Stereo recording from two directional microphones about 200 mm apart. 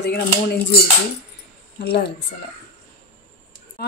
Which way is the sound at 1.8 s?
55° left (ahead or behind).